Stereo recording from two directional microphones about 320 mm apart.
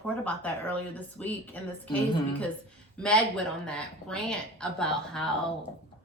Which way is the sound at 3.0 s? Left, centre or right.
Centre.